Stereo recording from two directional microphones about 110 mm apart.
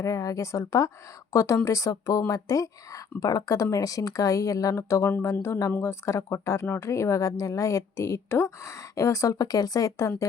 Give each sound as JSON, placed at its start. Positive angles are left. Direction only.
{"t": 0.0, "sound": "speech", "side_deg": 30}